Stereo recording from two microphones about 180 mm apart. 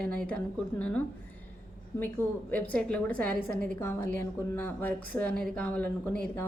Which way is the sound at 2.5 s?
10° left (ahead or behind).